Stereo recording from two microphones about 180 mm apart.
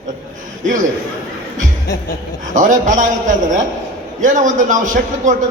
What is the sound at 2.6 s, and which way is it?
A man's voice, 45° right (ahead or behind).